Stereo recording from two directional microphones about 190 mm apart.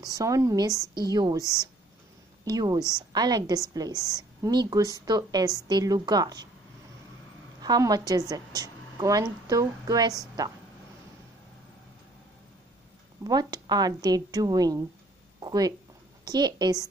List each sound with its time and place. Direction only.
0.0 s a woman's voice: 15° right (ahead or behind)
1.4 s speech: 15° left (ahead or behind)
2.4 s a woman's voice: 20° right (ahead or behind)
2.8 s speech: 15° left (ahead or behind)
3.1 s a woman's voice: 20° right (ahead or behind)
7.6 s a woman's voice: 20° right (ahead or behind)
13.3 s a woman's voice: 20° right (ahead or behind)